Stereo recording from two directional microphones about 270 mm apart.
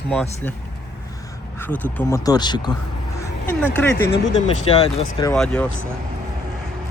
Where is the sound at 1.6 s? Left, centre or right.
Centre.